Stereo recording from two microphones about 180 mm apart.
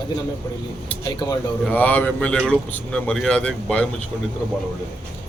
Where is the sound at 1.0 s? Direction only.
20° left (ahead or behind).